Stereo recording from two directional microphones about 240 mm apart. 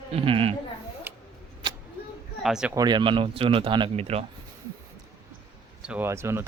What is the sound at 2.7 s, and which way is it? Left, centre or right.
Speech, centre.